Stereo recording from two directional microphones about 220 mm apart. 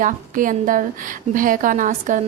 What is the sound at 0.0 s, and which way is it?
Speech, 35° right (ahead or behind).